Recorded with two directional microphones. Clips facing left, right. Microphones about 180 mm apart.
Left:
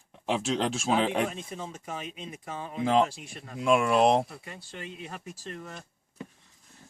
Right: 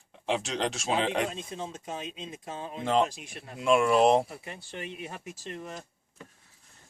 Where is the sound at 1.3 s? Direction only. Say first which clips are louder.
Right 1 dB; 20° right (ahead or behind).